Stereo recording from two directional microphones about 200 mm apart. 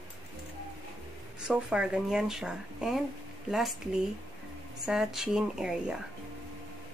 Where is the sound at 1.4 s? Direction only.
5° right (ahead or behind).